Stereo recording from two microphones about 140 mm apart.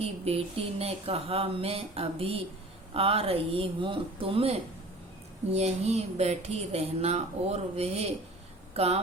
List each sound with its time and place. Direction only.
0.0 s speech: 45° right (ahead or behind)